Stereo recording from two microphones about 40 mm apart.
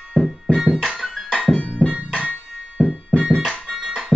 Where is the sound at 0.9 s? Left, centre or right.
Centre.